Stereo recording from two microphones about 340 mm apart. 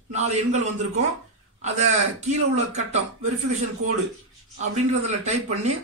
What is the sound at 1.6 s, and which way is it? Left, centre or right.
Speech, centre.